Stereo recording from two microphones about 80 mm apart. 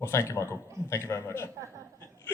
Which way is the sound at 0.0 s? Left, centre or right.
Left.